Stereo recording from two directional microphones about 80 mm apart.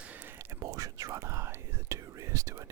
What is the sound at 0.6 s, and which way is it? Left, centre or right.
Speech, right.